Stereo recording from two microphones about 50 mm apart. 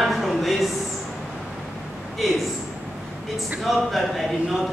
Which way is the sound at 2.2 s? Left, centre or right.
Centre.